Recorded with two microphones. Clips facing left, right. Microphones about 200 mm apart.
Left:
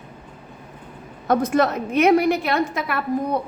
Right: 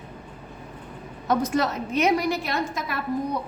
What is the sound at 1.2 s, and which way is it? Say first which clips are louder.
A woman's voice: left 4 dB; 55° left (ahead or behind).